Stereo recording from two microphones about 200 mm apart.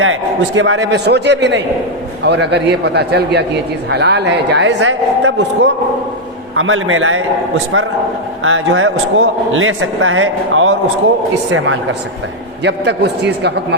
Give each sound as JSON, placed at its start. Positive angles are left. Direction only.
{"t": 0.0, "sound": "a man's voice", "side_deg": -75}
{"t": 6.6, "sound": "a man's voice", "side_deg": -85}
{"t": 12.6, "sound": "a man's voice", "side_deg": -60}